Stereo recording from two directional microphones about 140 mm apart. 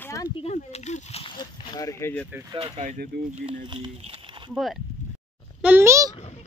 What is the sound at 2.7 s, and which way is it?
Speech, 55° right (ahead or behind).